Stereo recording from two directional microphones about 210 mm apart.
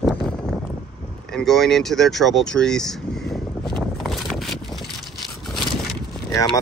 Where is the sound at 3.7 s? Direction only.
Centre (ahead or behind).